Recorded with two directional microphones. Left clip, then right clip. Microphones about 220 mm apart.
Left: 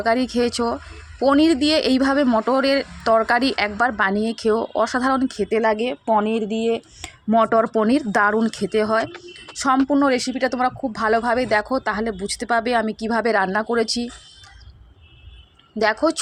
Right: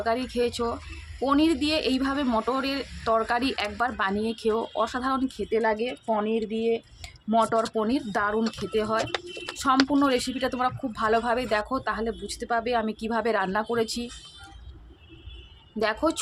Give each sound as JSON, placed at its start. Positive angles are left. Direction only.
{"t": 0.0, "sound": "speech", "side_deg": 30}
{"t": 15.8, "sound": "speech", "side_deg": 25}